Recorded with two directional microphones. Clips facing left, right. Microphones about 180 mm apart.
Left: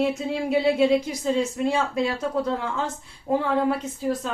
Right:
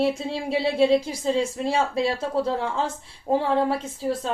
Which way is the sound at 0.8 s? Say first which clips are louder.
Right 1 dB; 30° right (ahead or behind).